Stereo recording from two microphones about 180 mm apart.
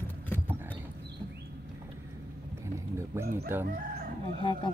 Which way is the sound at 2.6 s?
15° right (ahead or behind).